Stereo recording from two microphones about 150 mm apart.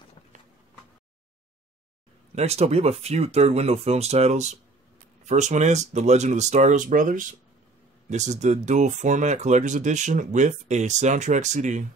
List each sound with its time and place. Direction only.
2.3 s speech: 45° right (ahead or behind)